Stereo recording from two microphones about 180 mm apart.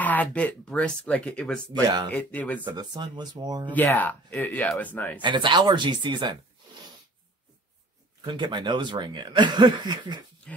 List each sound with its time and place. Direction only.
0.0 s speech: 10° left (ahead or behind)
1.7 s speech: 25° right (ahead or behind)
2.0 s speech: 10° left (ahead or behind)
2.6 s speech: 25° right (ahead or behind)
3.7 s speech: 10° left (ahead or behind)
5.2 s speech: 25° right (ahead or behind)
8.2 s speech: 25° right (ahead or behind)